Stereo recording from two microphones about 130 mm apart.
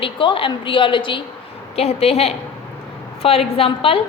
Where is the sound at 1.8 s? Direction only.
50° left (ahead or behind).